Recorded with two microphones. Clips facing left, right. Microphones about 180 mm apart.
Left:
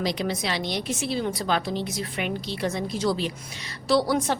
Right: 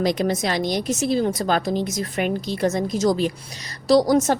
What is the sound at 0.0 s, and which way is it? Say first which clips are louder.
A woman's voice: right 6 dB; 50° right (ahead or behind).